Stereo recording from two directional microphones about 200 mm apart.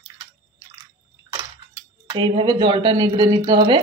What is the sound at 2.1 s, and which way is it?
Speech, 20° right (ahead or behind).